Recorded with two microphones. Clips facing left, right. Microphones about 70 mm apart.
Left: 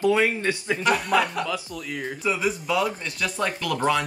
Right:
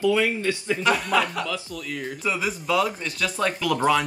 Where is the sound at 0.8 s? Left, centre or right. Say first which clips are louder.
Even; centre.